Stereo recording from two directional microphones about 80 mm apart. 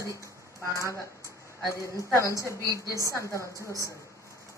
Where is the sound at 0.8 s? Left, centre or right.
Left.